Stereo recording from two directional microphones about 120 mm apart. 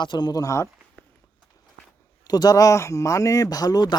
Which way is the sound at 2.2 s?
35° left (ahead or behind).